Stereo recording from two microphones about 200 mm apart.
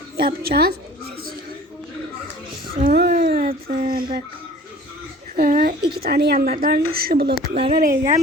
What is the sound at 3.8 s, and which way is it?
Speech, 45° right (ahead or behind).